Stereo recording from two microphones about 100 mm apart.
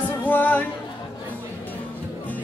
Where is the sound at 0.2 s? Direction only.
20° left (ahead or behind).